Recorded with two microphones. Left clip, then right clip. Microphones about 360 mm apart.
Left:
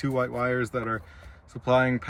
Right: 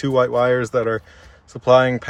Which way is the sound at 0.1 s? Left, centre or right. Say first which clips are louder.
Right 11 dB; centre.